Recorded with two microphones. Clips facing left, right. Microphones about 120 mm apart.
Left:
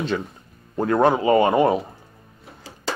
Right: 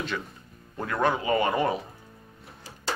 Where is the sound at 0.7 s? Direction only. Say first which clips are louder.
Left 8 dB; 30° left (ahead or behind).